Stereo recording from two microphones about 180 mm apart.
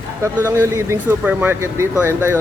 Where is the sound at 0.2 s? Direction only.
15° right (ahead or behind).